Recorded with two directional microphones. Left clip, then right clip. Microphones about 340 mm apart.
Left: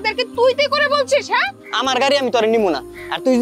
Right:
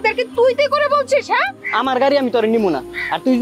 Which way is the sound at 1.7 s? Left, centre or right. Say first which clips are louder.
Right 1 dB; left.